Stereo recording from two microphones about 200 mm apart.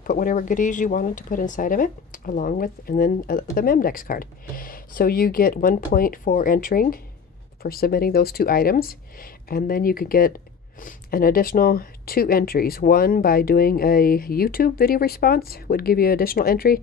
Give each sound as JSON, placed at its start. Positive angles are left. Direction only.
{"t": 0.0, "sound": "speech", "side_deg": 40}